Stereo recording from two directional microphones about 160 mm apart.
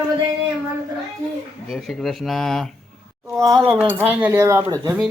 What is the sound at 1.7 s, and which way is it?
Speech, centre (ahead or behind).